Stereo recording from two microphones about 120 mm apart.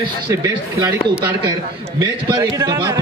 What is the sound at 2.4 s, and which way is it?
Speech, 40° right (ahead or behind).